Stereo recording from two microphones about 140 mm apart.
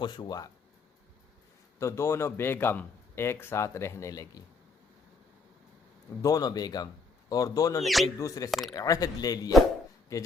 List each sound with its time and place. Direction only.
0.0 s speech: 30° left (ahead or behind)
1.8 s speech: 20° left (ahead or behind)
6.2 s speech: 25° left (ahead or behind)
7.8 s speech: centre (ahead or behind)
8.2 s speech: 25° left (ahead or behind)
8.4 s speech: centre (ahead or behind)
8.7 s speech: 25° left (ahead or behind)